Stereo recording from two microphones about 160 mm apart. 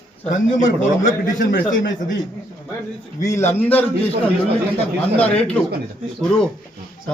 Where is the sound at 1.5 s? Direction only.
80° left.